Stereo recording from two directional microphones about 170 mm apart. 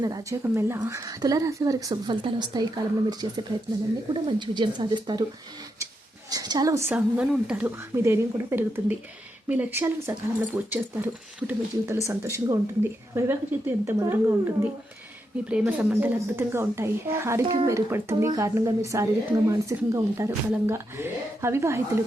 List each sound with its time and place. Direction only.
0.0 s speech: 20° right (ahead or behind)
6.3 s a woman's voice: 25° right (ahead or behind)